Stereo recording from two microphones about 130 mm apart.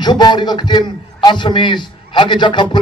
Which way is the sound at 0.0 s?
35° left (ahead or behind).